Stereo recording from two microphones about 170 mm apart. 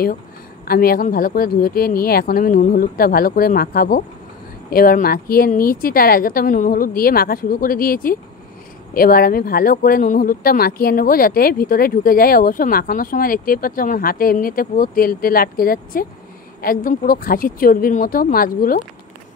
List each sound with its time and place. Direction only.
0.7 s speech: 60° left (ahead or behind)